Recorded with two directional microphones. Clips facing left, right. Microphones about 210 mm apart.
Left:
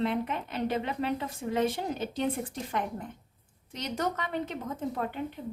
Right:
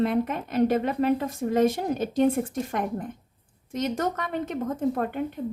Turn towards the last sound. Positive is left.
turn(degrees=-50)  # may be behind; listen again after turning